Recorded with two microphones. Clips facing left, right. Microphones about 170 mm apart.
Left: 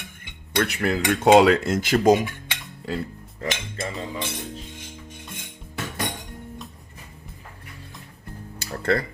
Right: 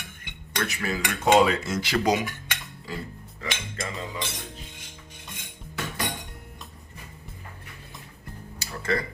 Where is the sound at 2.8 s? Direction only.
60° left (ahead or behind).